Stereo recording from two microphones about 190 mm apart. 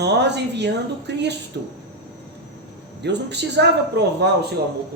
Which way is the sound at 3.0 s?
65° right (ahead or behind).